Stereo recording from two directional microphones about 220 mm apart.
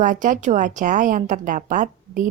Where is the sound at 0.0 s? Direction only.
35° right (ahead or behind).